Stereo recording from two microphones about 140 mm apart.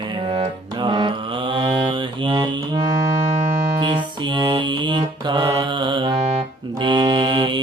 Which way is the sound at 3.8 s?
35° right (ahead or behind).